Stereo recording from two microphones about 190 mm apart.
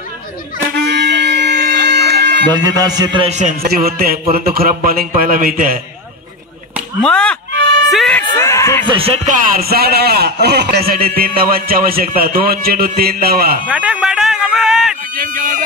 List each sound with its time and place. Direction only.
0.8 s music: 65° right (ahead or behind)
2.5 s music: 20° right (ahead or behind)
3.0 s a man's voice: 25° right (ahead or behind)
3.6 s a man's voice: 55° right (ahead or behind)
7.0 s chop: 5° left (ahead or behind)
7.9 s speech: 5° left (ahead or behind)
8.8 s music: 30° right (ahead or behind)
9.6 s a man's voice: 55° right (ahead or behind)
13.7 s music: 5° right (ahead or behind)
15.1 s a man's voice: 45° right (ahead or behind)